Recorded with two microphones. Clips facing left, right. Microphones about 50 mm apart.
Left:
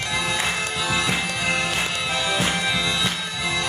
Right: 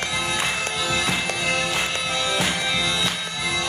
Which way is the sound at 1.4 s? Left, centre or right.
Centre.